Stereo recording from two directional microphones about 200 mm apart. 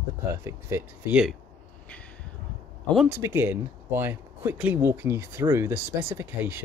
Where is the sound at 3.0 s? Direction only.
10° right (ahead or behind).